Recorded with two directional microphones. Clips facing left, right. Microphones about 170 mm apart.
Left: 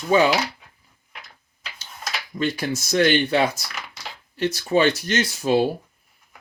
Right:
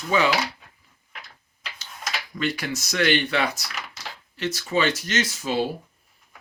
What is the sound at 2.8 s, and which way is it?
Speech, 40° left (ahead or behind).